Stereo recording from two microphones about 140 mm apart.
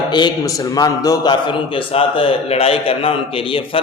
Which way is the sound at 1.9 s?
45° left (ahead or behind).